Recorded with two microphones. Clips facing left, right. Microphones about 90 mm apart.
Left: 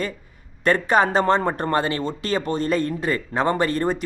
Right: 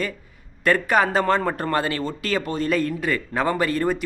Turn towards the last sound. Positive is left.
turn(degrees=30)  # may be behind; listen again after turning